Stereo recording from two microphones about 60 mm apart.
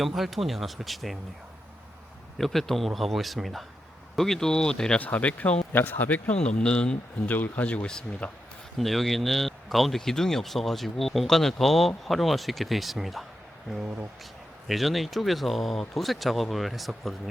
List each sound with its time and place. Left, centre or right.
0.2 s speech: centre
2.4 s speech: centre
4.9 s speech: left
7.3 s speech: left
8.8 s speech: centre
14.7 s speech: centre